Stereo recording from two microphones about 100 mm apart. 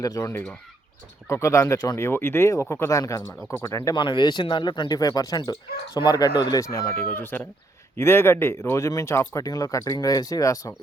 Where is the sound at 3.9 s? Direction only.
50° left (ahead or behind).